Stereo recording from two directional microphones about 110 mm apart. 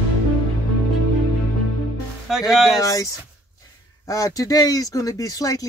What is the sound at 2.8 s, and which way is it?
Speech, 30° left (ahead or behind).